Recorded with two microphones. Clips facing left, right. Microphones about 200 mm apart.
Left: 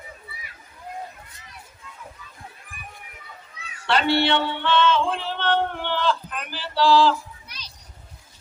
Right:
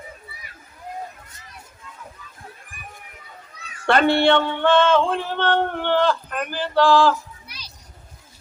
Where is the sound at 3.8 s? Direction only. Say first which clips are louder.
Right 4 dB; 50° right (ahead or behind).